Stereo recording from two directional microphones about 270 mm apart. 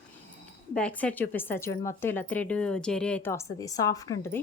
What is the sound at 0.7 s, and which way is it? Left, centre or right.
A woman's voice, centre.